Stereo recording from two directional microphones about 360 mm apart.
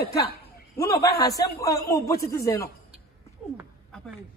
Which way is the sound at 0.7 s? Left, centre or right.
Centre.